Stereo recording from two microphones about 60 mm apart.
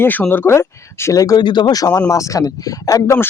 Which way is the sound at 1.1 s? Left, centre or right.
Left.